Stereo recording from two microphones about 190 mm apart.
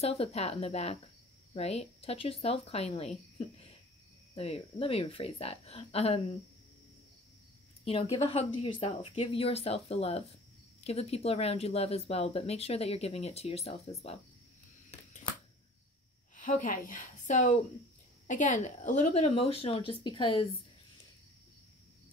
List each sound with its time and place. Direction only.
0.0 s speech: 30° left (ahead or behind)
7.8 s speech: 30° left (ahead or behind)
16.3 s a woman's voice: 45° left (ahead or behind); by 20.4 s 25° left (ahead or behind)